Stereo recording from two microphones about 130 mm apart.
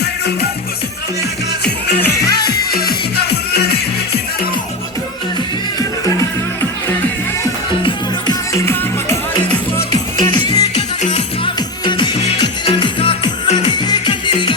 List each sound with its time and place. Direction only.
1.6 s music: 10° left (ahead or behind)
2.1 s music: 30° left (ahead or behind)
7.8 s music: 40° left (ahead or behind)
8.6 s music: 20° left (ahead or behind)
10.3 s music: 30° left (ahead or behind)
10.8 s music: 60° left (ahead or behind)
11.4 s music: 35° left (ahead or behind)